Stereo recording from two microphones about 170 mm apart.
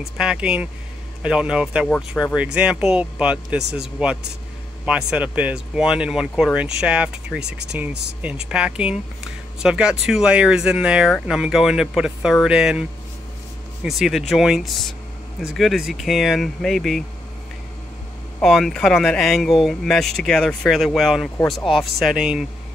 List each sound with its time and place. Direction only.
0.2 s speech: 5° right (ahead or behind)
7.4 s speech: 80° right
8.2 s speech: 5° right (ahead or behind)
13.8 s speech: centre (ahead or behind)
18.4 s speech: centre (ahead or behind)